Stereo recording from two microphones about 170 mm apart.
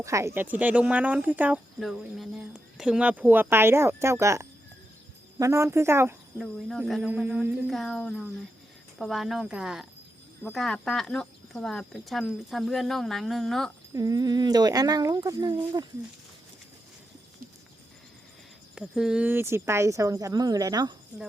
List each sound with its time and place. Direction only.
0.0 s speech: 20° right (ahead or behind)
6.4 s speech: centre (ahead or behind)
13.9 s speech: 20° right (ahead or behind)
18.7 s speech: 5° right (ahead or behind); by 20.9 s 20° right (ahead or behind)